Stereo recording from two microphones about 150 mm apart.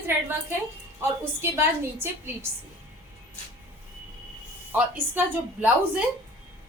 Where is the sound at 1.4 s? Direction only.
15° right (ahead or behind).